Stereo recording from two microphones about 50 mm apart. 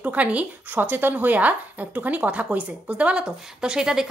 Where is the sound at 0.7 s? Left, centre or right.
Right.